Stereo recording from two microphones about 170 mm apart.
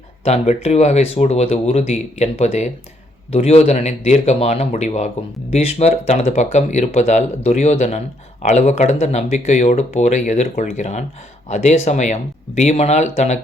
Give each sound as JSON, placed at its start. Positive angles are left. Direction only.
{"t": 0.3, "sound": "speech", "side_deg": 40}